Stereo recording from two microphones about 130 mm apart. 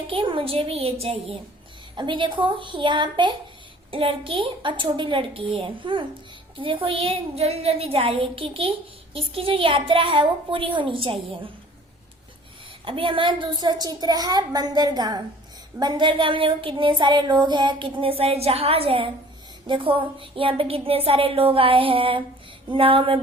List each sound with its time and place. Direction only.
0.1 s a woman's voice: 40° right (ahead or behind)
2.0 s child singing: 40° right (ahead or behind)
6.6 s a woman's voice: 40° right (ahead or behind)
12.8 s child singing: 45° right (ahead or behind)
19.6 s a woman's voice: 40° right (ahead or behind)